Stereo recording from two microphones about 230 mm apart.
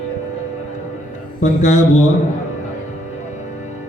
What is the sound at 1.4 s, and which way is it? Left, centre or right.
Speech, left.